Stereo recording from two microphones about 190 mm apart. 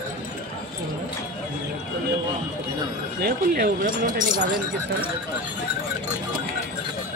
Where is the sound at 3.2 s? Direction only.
55° right (ahead or behind).